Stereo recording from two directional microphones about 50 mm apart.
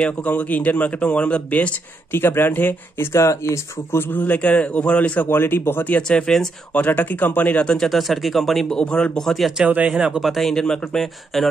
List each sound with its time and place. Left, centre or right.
0.3 s speech: left
2.1 s speech: left
3.1 s speech: left
4.1 s speech: left
4.4 s speech: left
5.3 s speech: left
6.0 s a man's voice: centre
6.7 s speech: left
7.6 s speech: centre
8.6 s a man's voice: centre
9.2 s a man's voice: centre
9.8 s speech: centre
10.5 s a man's voice: centre
11.3 s speech: centre